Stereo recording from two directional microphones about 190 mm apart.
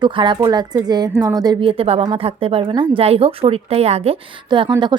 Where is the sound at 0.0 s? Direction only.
25° right (ahead or behind).